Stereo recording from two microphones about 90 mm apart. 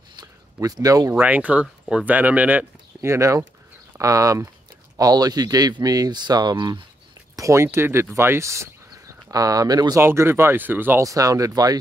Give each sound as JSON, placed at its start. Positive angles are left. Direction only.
{"t": 0.1, "sound": "a sound", "side_deg": -45}
{"t": 1.1, "sound": "speech", "side_deg": -20}
{"t": 3.0, "sound": "speech", "side_deg": -35}
{"t": 7.3, "sound": "speech", "side_deg": -35}
{"t": 9.9, "sound": "speech", "side_deg": -30}
{"t": 11.0, "sound": "speech", "side_deg": -40}